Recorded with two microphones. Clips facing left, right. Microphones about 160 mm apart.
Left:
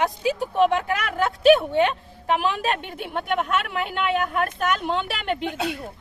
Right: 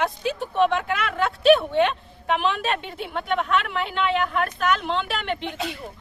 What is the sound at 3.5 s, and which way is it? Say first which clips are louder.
Speech: right 1 dB; 45° left (ahead or behind).